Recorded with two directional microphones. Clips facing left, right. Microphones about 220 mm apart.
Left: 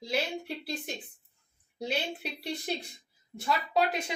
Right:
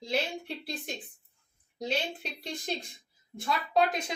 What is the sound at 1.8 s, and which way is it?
Speech, 10° left (ahead or behind).